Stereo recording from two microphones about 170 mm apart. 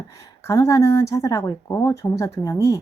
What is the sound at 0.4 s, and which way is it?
A woman's voice, 20° left (ahead or behind).